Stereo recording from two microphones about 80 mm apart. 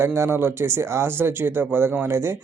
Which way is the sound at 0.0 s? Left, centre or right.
Right.